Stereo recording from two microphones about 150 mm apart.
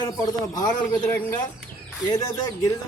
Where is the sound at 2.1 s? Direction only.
20° left (ahead or behind).